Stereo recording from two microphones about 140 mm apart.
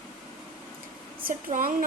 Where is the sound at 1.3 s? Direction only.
80° right.